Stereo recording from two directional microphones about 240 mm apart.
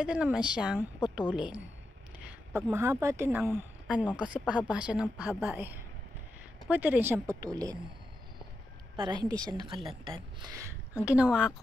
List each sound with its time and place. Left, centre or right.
0.0 s a woman's voice: centre
8.9 s speech: centre
11.1 s a woman's voice: centre